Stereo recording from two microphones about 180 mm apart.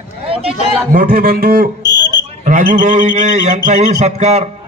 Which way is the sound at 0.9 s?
55° right (ahead or behind).